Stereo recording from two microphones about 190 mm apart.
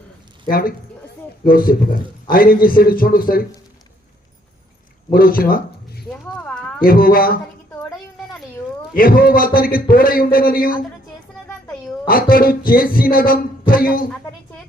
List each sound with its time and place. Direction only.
0.4 s speech: 50° left (ahead or behind)
5.1 s a sound: 50° left (ahead or behind)
6.1 s clip-clop: 5° left (ahead or behind)
6.8 s speech: 50° left (ahead or behind)
7.8 s a sound: centre (ahead or behind)
9.0 s speech: 50° left (ahead or behind)
12.0 s speech: 50° left (ahead or behind)